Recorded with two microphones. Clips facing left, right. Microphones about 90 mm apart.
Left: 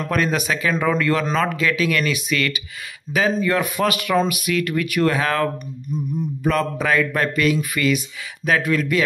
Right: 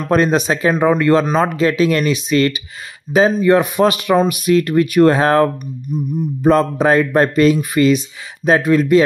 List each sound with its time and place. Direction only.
0.1 s speech: 30° right (ahead or behind)
5.9 s music: 15° right (ahead or behind)
6.4 s speech: 30° right (ahead or behind)